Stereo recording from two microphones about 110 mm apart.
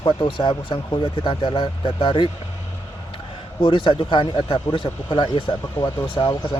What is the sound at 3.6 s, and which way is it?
Speech, 45° left (ahead or behind).